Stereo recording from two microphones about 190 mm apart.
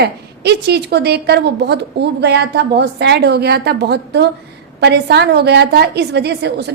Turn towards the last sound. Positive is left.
turn(degrees=-60)  # may be behind; listen again after turning